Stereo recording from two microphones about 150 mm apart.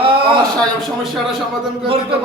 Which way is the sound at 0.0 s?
35° right (ahead or behind).